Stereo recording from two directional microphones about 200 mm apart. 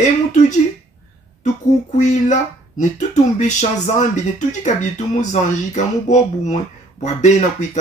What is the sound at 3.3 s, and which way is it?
Speech, 35° left (ahead or behind).